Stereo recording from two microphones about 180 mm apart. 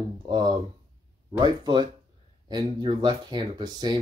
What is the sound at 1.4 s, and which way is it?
Speech, 25° right (ahead or behind).